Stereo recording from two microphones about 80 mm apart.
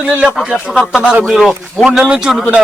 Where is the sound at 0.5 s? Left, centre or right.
Centre.